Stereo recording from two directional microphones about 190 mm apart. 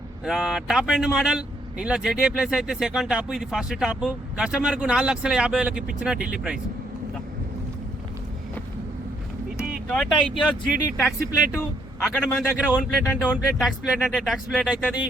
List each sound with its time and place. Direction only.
0.3 s speech: 5° right (ahead or behind)
9.9 s speech: centre (ahead or behind)